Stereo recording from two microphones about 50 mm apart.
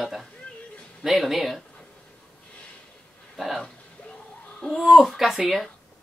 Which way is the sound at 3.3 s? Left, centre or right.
Centre.